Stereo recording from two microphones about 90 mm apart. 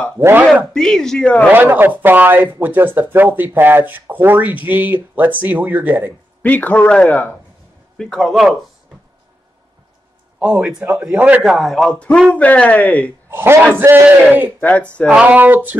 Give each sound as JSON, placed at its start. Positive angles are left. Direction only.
{"t": 0.2, "sound": "speech", "side_deg": -25}
{"t": 0.7, "sound": "a man's voice", "side_deg": 5}
{"t": 1.5, "sound": "speech", "side_deg": -20}
{"t": 6.4, "sound": "a man's voice", "side_deg": 20}
{"t": 8.0, "sound": "a man's voice", "side_deg": 5}
{"t": 10.4, "sound": "speech", "side_deg": -10}
{"t": 11.4, "sound": "a man's voice", "side_deg": 0}
{"t": 13.3, "sound": "a man's voice", "side_deg": -25}
{"t": 14.6, "sound": "speech", "side_deg": 15}
{"t": 15.0, "sound": "speech", "side_deg": -15}